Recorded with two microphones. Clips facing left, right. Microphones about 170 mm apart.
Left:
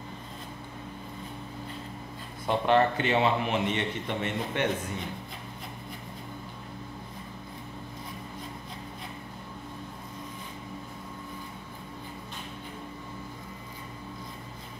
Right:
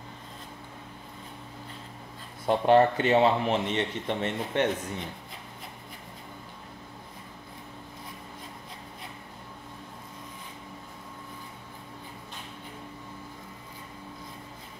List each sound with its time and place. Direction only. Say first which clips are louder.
2.4 s speech: right 3 dB; 35° right (ahead or behind)